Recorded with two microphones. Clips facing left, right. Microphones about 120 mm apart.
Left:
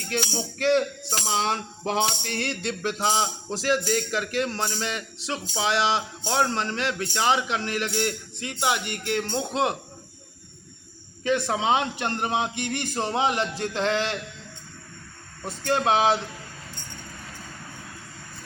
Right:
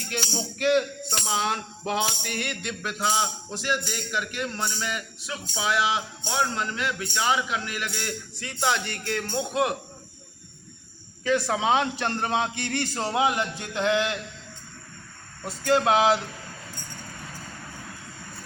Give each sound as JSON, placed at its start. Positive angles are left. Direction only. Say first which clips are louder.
{"t": 0.1, "sound": "music", "louder": "left 3 dB", "side_deg": 30}
{"t": 4.4, "sound": "a man's voice", "louder": "left 4 dB", "side_deg": 30}
{"t": 6.2, "sound": "music", "louder": "left 3 dB", "side_deg": 35}
{"t": 8.4, "sound": "a man's voice", "louder": "even", "side_deg": 15}
{"t": 11.2, "sound": "a man's voice", "louder": "even", "side_deg": 20}
{"t": 15.4, "sound": "a man's voice", "louder": "right 1 dB", "side_deg": 25}